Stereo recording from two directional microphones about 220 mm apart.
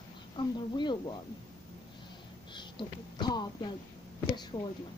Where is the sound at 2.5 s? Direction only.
20° left (ahead or behind).